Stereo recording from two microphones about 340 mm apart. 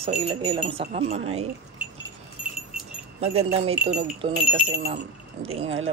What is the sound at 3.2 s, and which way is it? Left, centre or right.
Speech, centre.